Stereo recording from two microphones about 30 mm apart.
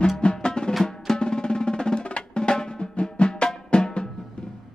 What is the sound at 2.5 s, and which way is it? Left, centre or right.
Music, left.